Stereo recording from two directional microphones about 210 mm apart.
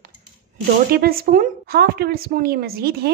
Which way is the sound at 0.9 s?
45° right (ahead or behind).